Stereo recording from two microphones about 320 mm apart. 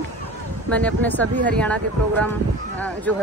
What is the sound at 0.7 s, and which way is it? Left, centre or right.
Speech, centre.